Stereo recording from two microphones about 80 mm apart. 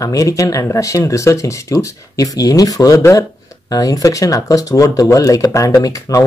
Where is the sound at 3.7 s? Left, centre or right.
Left.